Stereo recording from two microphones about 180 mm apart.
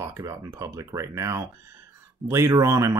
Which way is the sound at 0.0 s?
15° right (ahead or behind).